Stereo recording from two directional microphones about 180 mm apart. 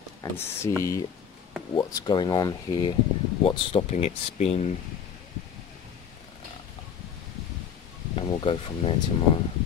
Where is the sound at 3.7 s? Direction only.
35° left (ahead or behind).